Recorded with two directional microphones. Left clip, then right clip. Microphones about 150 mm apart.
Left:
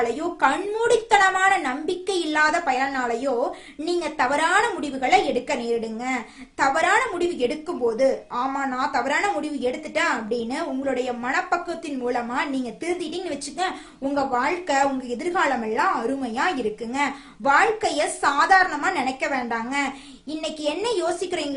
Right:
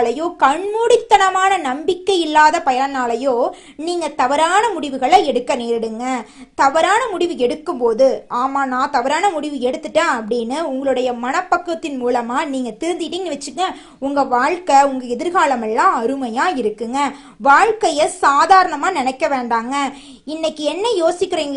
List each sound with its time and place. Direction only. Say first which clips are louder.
0.0 s a woman's voice: right 6 dB; 35° right (ahead or behind)